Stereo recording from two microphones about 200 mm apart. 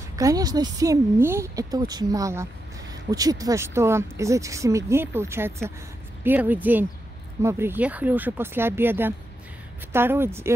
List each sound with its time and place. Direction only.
0.1 s speech: 15° right (ahead or behind)